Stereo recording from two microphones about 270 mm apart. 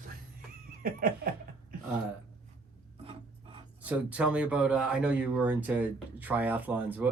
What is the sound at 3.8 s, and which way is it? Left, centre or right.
Speech, centre.